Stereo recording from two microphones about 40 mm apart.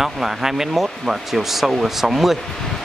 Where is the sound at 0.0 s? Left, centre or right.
Centre.